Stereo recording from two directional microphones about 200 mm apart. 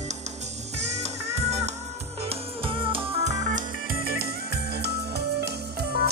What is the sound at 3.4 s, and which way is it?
Music, 45° right (ahead or behind).